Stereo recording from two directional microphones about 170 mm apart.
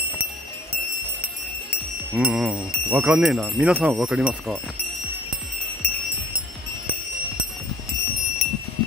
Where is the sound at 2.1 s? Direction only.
5° right (ahead or behind).